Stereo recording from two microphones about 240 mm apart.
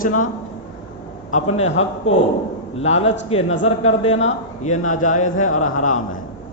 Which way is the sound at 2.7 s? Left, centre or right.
Left.